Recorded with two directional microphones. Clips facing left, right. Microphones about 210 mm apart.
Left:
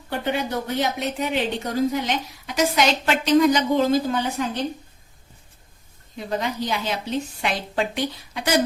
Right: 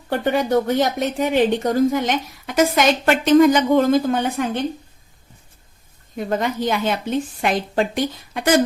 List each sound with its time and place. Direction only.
0.1 s speech: 50° right (ahead or behind)
6.1 s speech: 50° right (ahead or behind)